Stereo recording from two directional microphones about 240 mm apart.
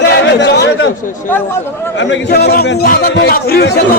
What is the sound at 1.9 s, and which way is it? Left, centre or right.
A man's voice, left.